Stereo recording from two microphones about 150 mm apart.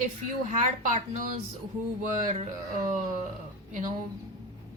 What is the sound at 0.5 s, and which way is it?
Speech, 55° right (ahead or behind).